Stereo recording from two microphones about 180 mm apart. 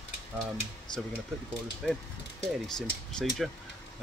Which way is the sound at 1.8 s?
Centre (ahead or behind).